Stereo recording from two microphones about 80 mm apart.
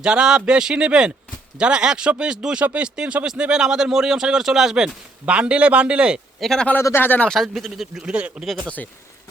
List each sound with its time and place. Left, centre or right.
0.0 s speech: centre
6.4 s speech: centre
6.9 s speech: left
7.3 s speech: centre
8.6 s speech: centre